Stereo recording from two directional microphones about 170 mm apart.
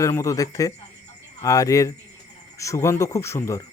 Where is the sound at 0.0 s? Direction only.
20° left (ahead or behind).